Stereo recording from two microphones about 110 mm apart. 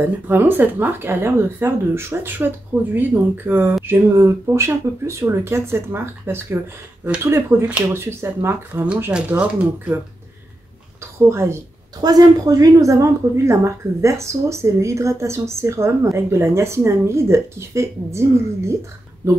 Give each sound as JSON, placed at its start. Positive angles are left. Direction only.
{"t": 0.0, "sound": "a woman's voice", "side_deg": -20}
{"t": 8.8, "sound": "speech", "side_deg": -10}
{"t": 11.0, "sound": "a woman's voice", "side_deg": -25}